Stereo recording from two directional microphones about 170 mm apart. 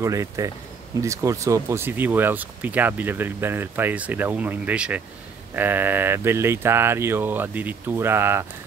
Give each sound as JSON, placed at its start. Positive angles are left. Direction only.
{"t": 0.0, "sound": "speech", "side_deg": -20}